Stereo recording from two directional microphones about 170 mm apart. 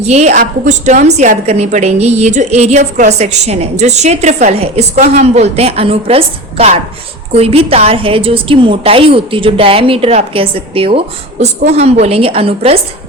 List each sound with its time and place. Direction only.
0.0 s a woman's voice: 40° right (ahead or behind)